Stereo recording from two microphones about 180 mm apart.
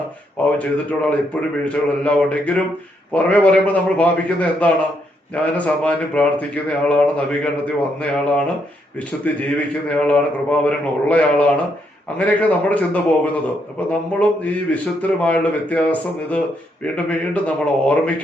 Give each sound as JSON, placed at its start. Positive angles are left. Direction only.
{"t": 0.4, "sound": "a man's voice", "side_deg": 5}
{"t": 1.6, "sound": "a man's voice", "side_deg": 5}